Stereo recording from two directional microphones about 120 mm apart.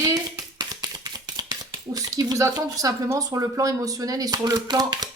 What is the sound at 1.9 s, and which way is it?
Speech, 25° right (ahead or behind).